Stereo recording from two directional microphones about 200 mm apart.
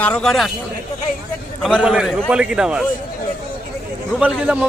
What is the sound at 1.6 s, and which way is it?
A man's voice, 5° right (ahead or behind).